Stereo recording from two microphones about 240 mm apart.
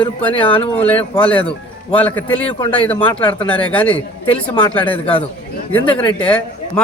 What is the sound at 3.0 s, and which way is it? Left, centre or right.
Speech, centre.